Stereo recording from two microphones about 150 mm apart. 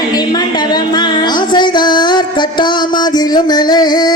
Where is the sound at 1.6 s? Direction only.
30° left (ahead or behind).